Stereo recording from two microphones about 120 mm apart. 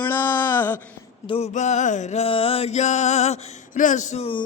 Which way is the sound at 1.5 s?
85° left.